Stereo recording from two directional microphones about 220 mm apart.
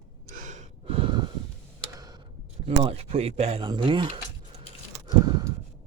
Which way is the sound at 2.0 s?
20° right (ahead or behind).